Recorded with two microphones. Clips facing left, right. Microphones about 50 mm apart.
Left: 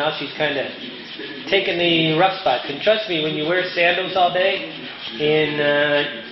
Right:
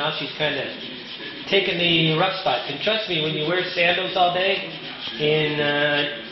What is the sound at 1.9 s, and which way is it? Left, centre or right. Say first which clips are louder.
Speech: left 4 dB; centre.